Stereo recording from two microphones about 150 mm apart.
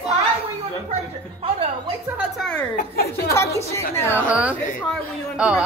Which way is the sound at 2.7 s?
90° left.